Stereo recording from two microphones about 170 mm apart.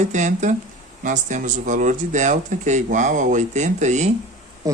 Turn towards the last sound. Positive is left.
turn(degrees=-20)  # may be behind; listen again after turning